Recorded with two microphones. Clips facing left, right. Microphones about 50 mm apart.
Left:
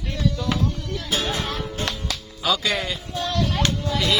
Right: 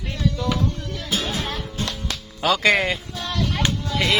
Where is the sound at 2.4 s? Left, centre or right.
Right.